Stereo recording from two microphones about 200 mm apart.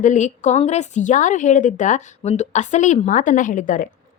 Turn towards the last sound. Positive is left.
turn(degrees=40)  # may be behind; listen again after turning